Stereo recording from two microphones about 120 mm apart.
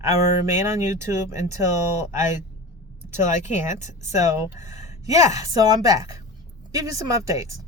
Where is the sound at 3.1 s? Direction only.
80° left.